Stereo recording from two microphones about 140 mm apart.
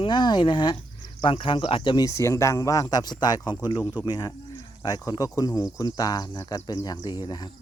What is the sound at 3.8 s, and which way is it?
Speech, 10° right (ahead or behind).